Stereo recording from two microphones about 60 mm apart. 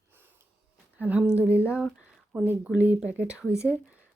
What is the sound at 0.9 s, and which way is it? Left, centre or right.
Speech, right.